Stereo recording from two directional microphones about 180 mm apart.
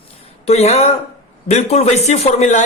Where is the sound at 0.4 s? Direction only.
35° left (ahead or behind).